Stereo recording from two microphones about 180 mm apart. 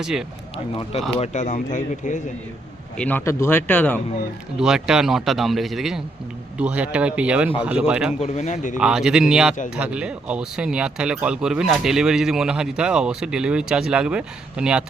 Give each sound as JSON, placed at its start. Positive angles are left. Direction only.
{"t": 0.0, "sound": "speech", "side_deg": -5}
{"t": 0.5, "sound": "speech", "side_deg": 35}
{"t": 3.0, "sound": "speech", "side_deg": 10}
{"t": 4.5, "sound": "speech", "side_deg": -5}
{"t": 8.2, "sound": "speech", "side_deg": 40}
{"t": 8.8, "sound": "speech", "side_deg": -5}